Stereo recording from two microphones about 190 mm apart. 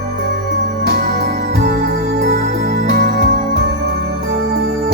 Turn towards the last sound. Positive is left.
turn(degrees=-55)  # may be behind; listen again after turning